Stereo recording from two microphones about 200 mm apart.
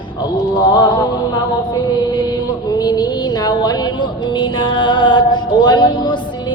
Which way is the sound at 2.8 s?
20° left (ahead or behind).